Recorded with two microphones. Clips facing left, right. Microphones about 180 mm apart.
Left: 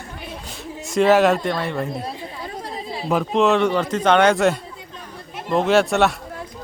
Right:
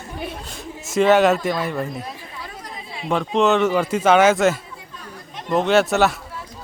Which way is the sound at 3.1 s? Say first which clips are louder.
Even; centre (ahead or behind).